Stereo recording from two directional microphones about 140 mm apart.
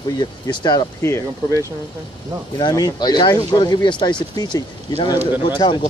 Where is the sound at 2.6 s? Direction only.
30° left (ahead or behind).